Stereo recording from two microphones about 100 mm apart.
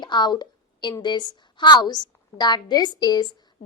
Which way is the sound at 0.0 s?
45° left (ahead or behind).